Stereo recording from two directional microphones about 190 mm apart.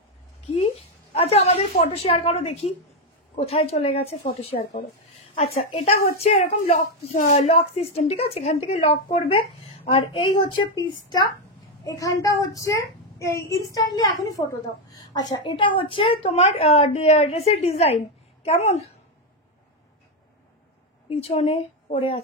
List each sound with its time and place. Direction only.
1.1 s a woman's voice: 30° left (ahead or behind)
21.1 s a woman's voice: 30° left (ahead or behind)